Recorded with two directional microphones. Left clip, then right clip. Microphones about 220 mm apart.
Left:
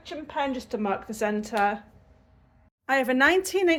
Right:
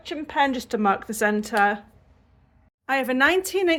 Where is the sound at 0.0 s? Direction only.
55° right (ahead or behind); by 1.8 s 35° right (ahead or behind).